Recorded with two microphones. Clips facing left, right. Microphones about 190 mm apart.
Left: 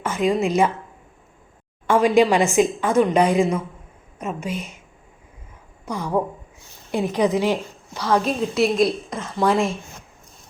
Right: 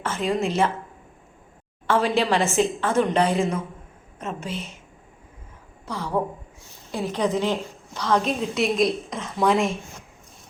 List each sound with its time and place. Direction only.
0.0 s a woman's voice: 10° left (ahead or behind)
1.9 s a woman's voice: 15° left (ahead or behind)
5.8 s a woman's voice: 15° left (ahead or behind)